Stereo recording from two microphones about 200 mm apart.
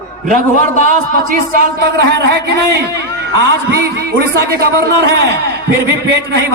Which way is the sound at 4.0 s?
50° right (ahead or behind).